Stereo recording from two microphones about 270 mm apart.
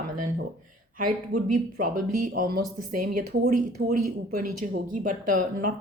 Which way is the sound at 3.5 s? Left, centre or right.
Right.